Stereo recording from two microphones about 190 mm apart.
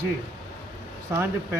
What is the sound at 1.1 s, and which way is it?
Speech, 10° right (ahead or behind).